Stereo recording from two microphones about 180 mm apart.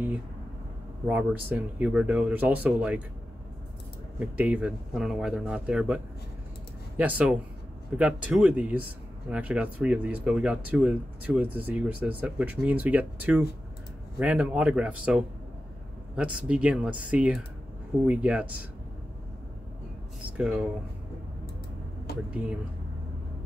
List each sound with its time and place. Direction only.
1.0 s speech: 10° right (ahead or behind)
4.2 s speech: 10° right (ahead or behind)
7.0 s speech: 10° right (ahead or behind)
20.3 s speech: 5° right (ahead or behind)
22.1 s a sound: 60° left (ahead or behind)